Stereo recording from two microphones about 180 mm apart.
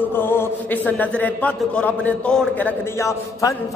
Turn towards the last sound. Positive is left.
turn(degrees=15)  # may be behind; listen again after turning